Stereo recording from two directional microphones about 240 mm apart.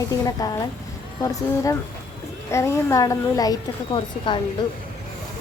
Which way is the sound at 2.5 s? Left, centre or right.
Centre.